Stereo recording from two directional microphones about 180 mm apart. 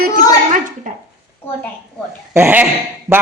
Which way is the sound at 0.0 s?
45° right (ahead or behind).